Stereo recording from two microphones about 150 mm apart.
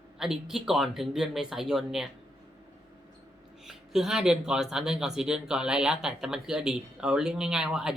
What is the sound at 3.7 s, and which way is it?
Speech, 5° right (ahead or behind).